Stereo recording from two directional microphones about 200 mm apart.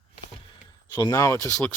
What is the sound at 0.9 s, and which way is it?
Speech, 20° left (ahead or behind).